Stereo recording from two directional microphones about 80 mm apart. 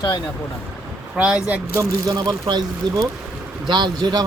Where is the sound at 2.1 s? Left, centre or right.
Right.